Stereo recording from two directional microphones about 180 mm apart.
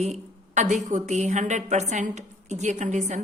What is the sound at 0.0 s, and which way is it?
A woman's voice, 40° right (ahead or behind).